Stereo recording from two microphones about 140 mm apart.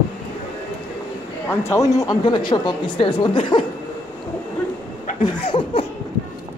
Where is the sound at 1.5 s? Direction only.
20° left (ahead or behind); by 3.6 s 35° left (ahead or behind).